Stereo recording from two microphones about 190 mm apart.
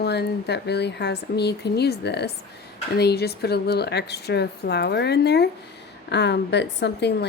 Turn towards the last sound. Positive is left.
turn(degrees=60)  # may be behind; listen again after turning